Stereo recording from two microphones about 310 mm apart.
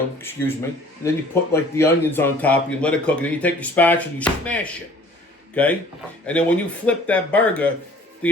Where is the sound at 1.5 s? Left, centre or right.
Centre.